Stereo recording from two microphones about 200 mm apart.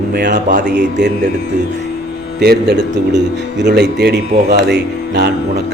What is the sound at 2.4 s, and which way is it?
A man's voice, 55° right (ahead or behind).